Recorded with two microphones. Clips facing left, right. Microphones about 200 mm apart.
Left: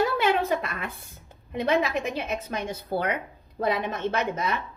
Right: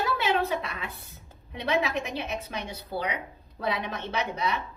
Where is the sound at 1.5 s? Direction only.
50° left (ahead or behind).